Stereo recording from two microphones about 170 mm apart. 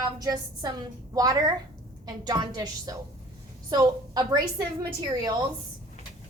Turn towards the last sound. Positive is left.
turn(degrees=-25)  # may be behind; listen again after turning